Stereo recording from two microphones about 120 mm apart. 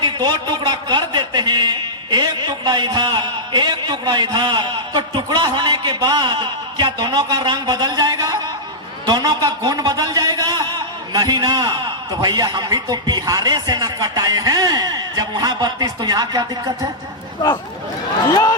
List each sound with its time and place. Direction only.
0.0 s a man's voice: 35° right (ahead or behind)
18.3 s speech: 30° left (ahead or behind)